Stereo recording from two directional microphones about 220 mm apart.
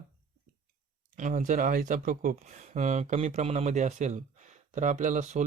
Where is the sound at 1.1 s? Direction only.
35° right (ahead or behind).